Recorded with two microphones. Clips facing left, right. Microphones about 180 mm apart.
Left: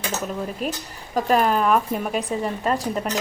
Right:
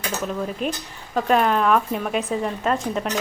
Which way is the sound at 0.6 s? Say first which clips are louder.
Right 1 dB; 5° left (ahead or behind).